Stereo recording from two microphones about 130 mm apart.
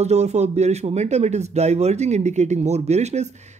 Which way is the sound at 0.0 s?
55° right (ahead or behind).